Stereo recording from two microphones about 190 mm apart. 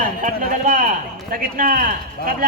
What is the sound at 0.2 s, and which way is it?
Speech, 45° right (ahead or behind).